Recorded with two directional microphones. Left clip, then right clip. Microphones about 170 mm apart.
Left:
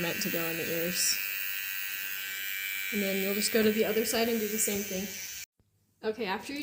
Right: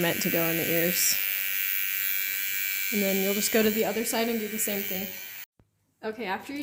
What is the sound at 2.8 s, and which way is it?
Speech, 55° right (ahead or behind).